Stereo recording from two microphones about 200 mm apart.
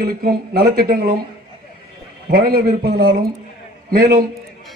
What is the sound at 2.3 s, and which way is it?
A man's voice, 50° right (ahead or behind).